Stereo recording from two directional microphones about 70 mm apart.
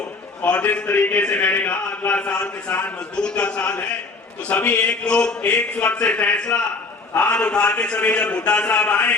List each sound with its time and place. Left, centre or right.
0.4 s a man's voice: left